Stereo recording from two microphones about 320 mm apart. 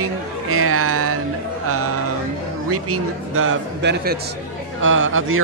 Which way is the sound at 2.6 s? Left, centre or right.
Right.